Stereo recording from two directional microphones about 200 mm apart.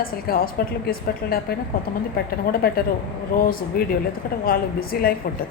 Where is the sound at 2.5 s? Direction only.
50° left (ahead or behind).